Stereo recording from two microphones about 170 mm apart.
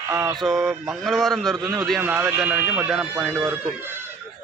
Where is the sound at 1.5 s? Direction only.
15° right (ahead or behind).